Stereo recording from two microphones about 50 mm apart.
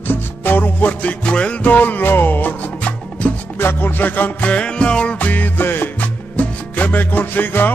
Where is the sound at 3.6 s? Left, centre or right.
Left.